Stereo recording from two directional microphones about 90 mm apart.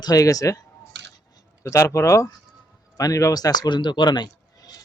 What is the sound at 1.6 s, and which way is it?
Speech, 30° left (ahead or behind).